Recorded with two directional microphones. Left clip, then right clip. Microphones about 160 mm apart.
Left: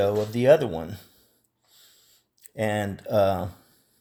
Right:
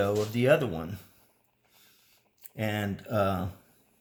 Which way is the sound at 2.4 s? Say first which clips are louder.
Left 6 dB; 35° left (ahead or behind).